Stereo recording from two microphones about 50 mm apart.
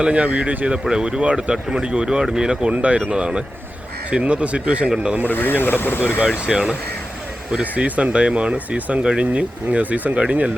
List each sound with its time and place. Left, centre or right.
0.0 s speech: right
5.2 s speech: left
6.4 s speech: centre
7.6 s speech: right